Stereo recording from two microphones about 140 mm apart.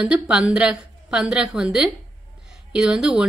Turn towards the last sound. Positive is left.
turn(degrees=-5)  # may be behind; listen again after turning